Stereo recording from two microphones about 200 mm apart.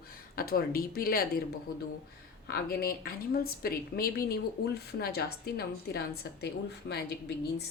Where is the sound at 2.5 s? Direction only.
50° left (ahead or behind).